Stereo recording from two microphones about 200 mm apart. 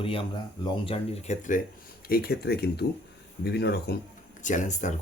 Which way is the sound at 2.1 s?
50° left (ahead or behind).